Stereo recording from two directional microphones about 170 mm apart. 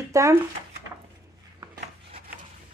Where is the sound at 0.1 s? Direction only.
15° right (ahead or behind).